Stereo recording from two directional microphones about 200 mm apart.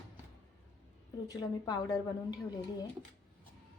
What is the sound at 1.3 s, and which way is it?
Speech, 20° left (ahead or behind).